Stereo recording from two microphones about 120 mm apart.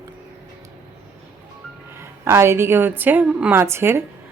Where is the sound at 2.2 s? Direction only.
20° right (ahead or behind).